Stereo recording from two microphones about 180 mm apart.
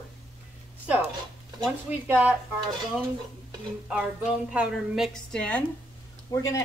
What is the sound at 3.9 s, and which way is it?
A woman's voice, 5° right (ahead or behind).